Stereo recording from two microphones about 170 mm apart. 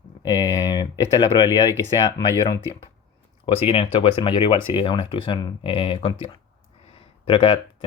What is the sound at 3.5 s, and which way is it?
Speech, 35° left (ahead or behind).